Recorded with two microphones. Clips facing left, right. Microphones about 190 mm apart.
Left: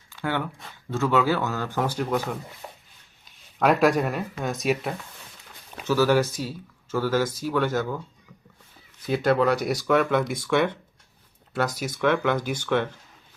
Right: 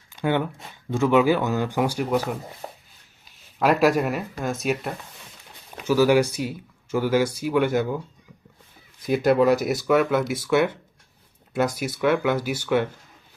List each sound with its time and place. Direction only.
0.1 s a sound: 20° right (ahead or behind)
0.9 s speech: 15° right (ahead or behind)
3.2 s speech: 5° right (ahead or behind)
5.8 s speech: 10° right (ahead or behind)
9.0 s speech: 10° right (ahead or behind)